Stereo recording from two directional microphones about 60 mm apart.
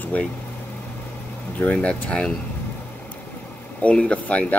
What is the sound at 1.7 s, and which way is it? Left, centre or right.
Speech, centre.